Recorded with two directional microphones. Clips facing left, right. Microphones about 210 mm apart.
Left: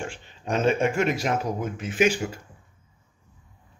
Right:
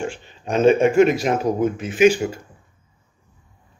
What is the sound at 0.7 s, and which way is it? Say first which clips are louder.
A man's voice: right 9 dB; 20° right (ahead or behind).